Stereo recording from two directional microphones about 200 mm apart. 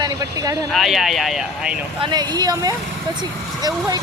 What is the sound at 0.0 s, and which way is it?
Speech, 15° right (ahead or behind).